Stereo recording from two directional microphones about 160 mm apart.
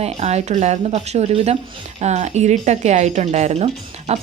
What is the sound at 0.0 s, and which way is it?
A woman's voice, 40° right (ahead or behind).